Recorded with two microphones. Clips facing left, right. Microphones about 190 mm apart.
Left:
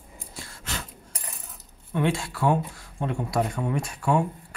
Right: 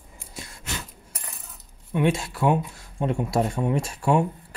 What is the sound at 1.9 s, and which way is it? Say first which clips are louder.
Speech: right 2 dB; 20° right (ahead or behind).